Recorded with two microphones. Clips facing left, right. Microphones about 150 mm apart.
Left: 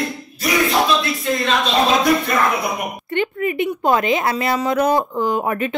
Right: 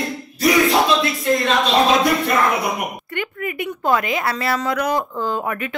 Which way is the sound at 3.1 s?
25° left (ahead or behind).